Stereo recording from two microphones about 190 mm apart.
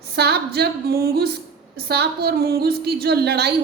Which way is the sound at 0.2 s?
60° right (ahead or behind).